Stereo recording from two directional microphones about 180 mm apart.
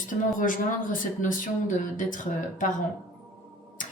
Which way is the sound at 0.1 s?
45° left (ahead or behind).